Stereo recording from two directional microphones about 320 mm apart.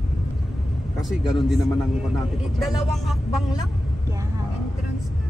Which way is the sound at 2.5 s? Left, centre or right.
Centre.